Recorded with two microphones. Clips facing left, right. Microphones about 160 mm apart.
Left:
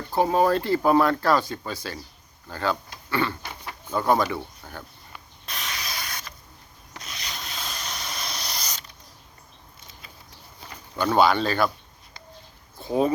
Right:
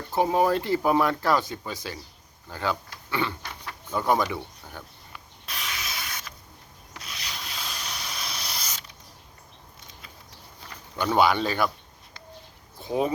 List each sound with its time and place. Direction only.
0.2 s speech: 15° right (ahead or behind)
3.1 s a sound: 15° right (ahead or behind)
3.4 s dog: 15° left (ahead or behind)
3.9 s speech: 15° right (ahead or behind)
5.5 s a sound: centre (ahead or behind)
6.9 s sanding: 5° right (ahead or behind)
10.9 s speech: 15° right (ahead or behind)